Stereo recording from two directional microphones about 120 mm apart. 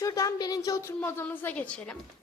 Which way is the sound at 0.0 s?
30° left (ahead or behind).